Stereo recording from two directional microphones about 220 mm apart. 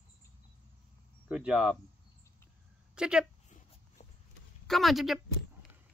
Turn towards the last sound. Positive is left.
turn(degrees=0)  # may be behind; listen again after turning